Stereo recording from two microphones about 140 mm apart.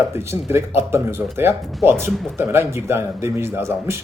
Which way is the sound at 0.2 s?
20° right (ahead or behind).